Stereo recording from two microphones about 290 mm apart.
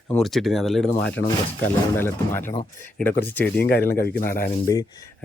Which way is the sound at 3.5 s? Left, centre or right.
Left.